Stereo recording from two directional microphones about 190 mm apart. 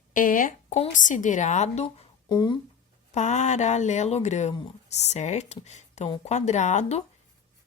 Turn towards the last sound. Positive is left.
turn(degrees=35)  # may be behind; listen again after turning